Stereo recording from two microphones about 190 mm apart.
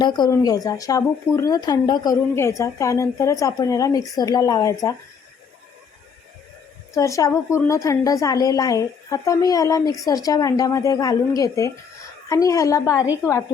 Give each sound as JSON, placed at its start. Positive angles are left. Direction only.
{"t": 0.0, "sound": "speech", "side_deg": 20}
{"t": 6.9, "sound": "speech", "side_deg": 15}